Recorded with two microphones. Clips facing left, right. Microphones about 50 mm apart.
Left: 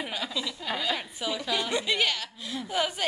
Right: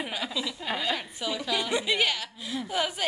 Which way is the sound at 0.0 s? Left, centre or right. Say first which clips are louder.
Right 1 dB; centre.